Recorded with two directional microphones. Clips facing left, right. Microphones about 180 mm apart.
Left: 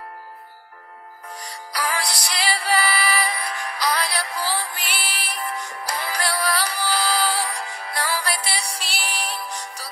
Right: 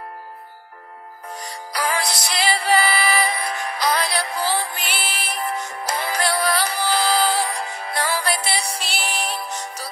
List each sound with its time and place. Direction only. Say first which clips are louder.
1.5 s music: right 3 dB; 25° right (ahead or behind)